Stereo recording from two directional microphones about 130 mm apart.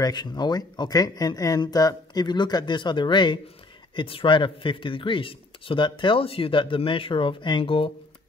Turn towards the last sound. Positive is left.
turn(degrees=45)  # may be behind; listen again after turning